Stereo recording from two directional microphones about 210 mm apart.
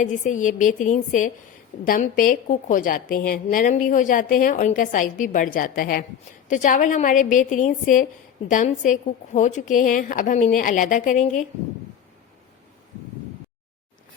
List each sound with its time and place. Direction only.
0.0 s a woman's voice: 35° left (ahead or behind)